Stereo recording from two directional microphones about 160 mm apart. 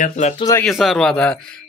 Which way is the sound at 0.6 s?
Centre (ahead or behind).